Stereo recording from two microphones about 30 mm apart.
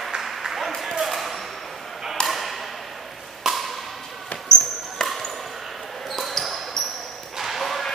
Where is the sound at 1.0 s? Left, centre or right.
Centre.